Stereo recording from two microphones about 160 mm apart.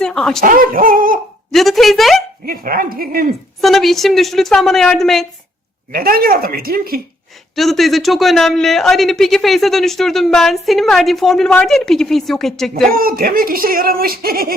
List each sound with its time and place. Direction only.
0.0 s a sound: 5° left (ahead or behind)
0.4 s speech: 60° right (ahead or behind)
1.5 s a man's voice: centre (ahead or behind)
2.5 s speech: 65° right (ahead or behind)
3.6 s a man's voice: centre (ahead or behind)
5.9 s speech: 65° right (ahead or behind)
7.5 s a man's voice: centre (ahead or behind)
12.9 s speech: 65° right (ahead or behind)